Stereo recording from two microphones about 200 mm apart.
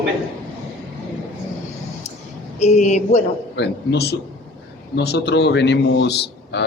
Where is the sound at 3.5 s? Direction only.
60° left (ahead or behind).